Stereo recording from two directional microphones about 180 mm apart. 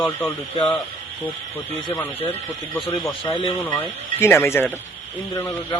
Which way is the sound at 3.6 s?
10° left (ahead or behind).